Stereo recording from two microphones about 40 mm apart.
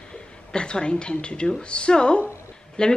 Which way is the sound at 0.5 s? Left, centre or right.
Left.